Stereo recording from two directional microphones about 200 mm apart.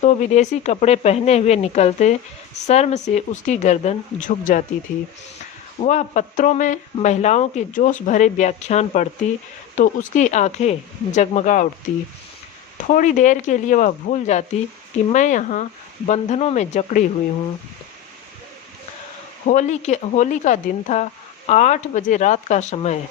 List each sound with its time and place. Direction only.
0.0 s speech: 35° left (ahead or behind)
5.8 s speech: 35° left (ahead or behind)
12.9 s speech: 40° left (ahead or behind)
19.5 s speech: 40° left (ahead or behind)